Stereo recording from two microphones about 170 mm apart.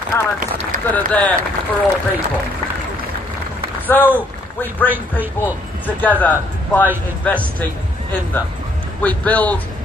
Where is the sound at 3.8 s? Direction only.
10° left (ahead or behind).